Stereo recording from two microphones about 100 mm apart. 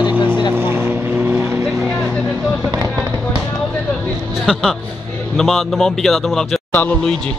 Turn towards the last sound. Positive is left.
turn(degrees=0)  # may be behind; listen again after turning